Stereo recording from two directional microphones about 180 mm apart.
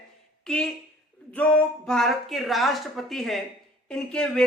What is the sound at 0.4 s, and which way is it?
Speech, 5° left (ahead or behind).